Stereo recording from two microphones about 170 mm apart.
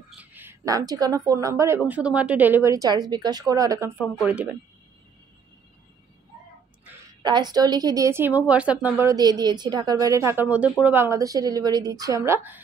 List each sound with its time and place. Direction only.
0.2 s a woman's voice: 10° right (ahead or behind)
4.3 s speech: 10° right (ahead or behind)
7.2 s speech: 25° right (ahead or behind)